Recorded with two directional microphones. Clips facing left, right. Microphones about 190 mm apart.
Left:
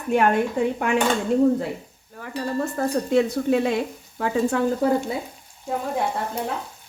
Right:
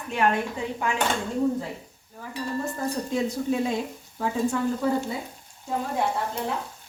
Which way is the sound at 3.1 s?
70° left (ahead or behind).